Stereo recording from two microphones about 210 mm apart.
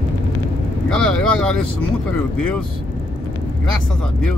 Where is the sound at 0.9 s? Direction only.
5° left (ahead or behind).